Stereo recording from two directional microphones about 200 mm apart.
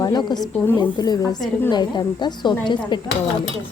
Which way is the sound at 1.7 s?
20° left (ahead or behind).